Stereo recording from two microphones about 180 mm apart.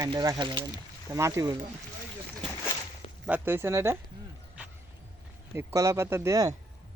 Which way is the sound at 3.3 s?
10° right (ahead or behind).